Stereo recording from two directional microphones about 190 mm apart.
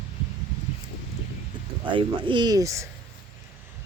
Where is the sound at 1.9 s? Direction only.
25° right (ahead or behind).